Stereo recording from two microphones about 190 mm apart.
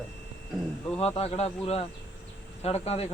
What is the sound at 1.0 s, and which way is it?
A man's voice, 30° left (ahead or behind).